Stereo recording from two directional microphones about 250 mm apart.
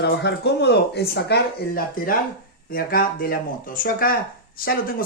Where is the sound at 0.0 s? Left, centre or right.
Left.